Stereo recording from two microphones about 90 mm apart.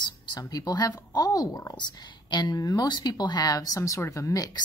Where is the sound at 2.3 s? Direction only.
60° left (ahead or behind); by 4.5 s 40° left (ahead or behind).